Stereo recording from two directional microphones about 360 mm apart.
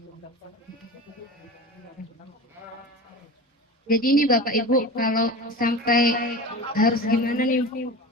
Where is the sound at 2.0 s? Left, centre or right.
Left.